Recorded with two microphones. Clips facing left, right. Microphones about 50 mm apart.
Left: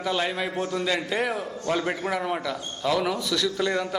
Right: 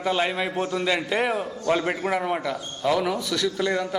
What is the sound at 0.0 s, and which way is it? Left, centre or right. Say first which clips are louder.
A man's voice: right 2 dB; centre.